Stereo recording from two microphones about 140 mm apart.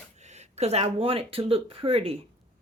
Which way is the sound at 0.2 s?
55° right (ahead or behind).